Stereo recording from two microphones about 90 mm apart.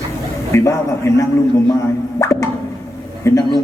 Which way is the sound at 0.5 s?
35° left (ahead or behind).